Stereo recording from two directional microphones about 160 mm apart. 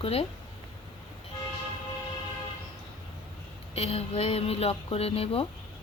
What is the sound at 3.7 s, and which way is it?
Speech, 40° left (ahead or behind).